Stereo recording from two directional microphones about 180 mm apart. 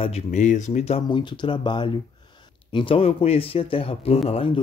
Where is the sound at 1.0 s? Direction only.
25° left (ahead or behind).